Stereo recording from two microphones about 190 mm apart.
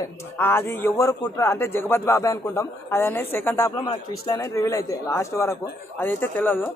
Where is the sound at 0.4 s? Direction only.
10° left (ahead or behind).